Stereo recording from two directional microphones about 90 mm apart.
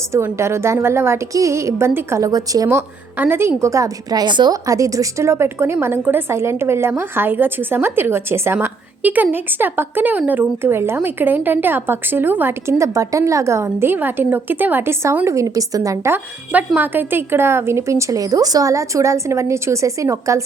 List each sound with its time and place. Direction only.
0.3 s speech: 30° right (ahead or behind)
2.6 s speech: 25° right (ahead or behind)
3.6 s a woman's voice: 35° right (ahead or behind); by 4.5 s 55° right (ahead or behind)
4.5 s speech: 40° right (ahead or behind); by 12.7 s 25° right (ahead or behind)
12.8 s speech: 35° right (ahead or behind)
16.1 s speech: 20° right (ahead or behind); by 20.4 s 35° right (ahead or behind)